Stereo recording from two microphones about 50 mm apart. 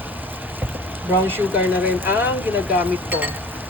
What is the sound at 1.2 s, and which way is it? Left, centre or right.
Speech, right.